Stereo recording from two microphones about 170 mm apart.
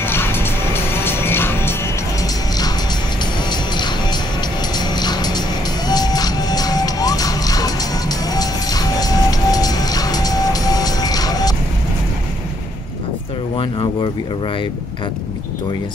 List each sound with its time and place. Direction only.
0.0 s music: 15° left (ahead or behind)